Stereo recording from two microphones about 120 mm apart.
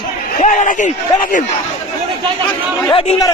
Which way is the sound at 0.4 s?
90° left.